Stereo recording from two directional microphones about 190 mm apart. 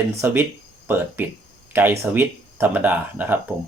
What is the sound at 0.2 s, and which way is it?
Speech, 10° right (ahead or behind).